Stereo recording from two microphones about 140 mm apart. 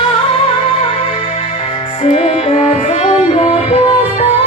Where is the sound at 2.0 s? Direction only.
45° left (ahead or behind).